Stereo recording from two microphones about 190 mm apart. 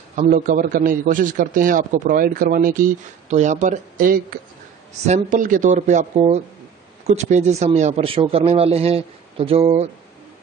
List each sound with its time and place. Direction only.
0.1 s a man's voice: 45° right (ahead or behind)
5.0 s speech: 40° right (ahead or behind)